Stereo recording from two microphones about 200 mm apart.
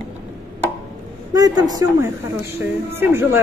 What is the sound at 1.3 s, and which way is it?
A man's voice, 20° right (ahead or behind).